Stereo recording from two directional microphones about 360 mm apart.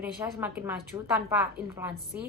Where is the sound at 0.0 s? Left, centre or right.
Centre.